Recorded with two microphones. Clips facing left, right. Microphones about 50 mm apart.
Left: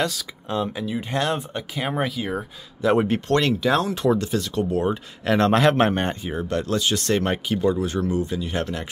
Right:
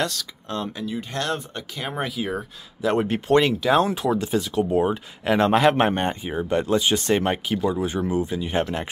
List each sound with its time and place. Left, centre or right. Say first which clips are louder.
0.0 s speech: left 1 dB; centre
2.0 s speech: even; centre
3.3 s speech: right 5 dB; centre
7.4 s speech: left 2 dB; centre
7.8 s speech: even; centre